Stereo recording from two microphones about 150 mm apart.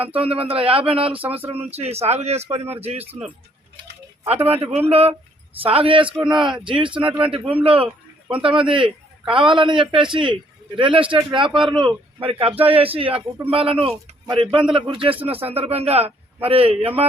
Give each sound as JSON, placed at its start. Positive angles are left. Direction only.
{"t": 0.0, "sound": "a man's voice", "side_deg": -40}
{"t": 1.1, "sound": "a sound", "side_deg": -10}
{"t": 1.7, "sound": "speech", "side_deg": -45}
{"t": 4.5, "sound": "a man's voice", "side_deg": -40}